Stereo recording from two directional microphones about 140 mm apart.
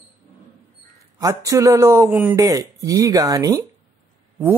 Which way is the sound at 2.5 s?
25° right (ahead or behind).